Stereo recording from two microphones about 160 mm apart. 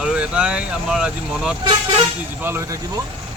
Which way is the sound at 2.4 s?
15° right (ahead or behind).